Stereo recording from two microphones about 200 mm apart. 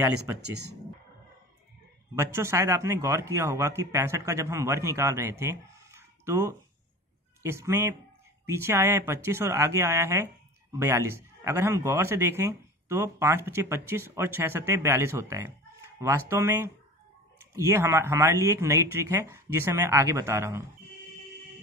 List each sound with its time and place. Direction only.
0.4 s speech: 55° right (ahead or behind)
2.1 s speech: 15° right (ahead or behind)